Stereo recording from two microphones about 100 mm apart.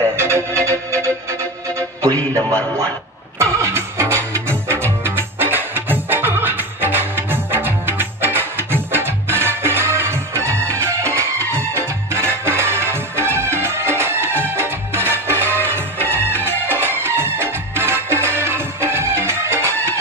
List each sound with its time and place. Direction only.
0.1 s music: 25° right (ahead or behind)
3.3 s music: 30° right (ahead or behind)
16.0 s music: 20° left (ahead or behind)
16.3 s music: 20° right (ahead or behind)